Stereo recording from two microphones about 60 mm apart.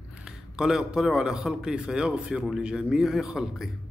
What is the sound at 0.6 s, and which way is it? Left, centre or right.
A man's voice, centre.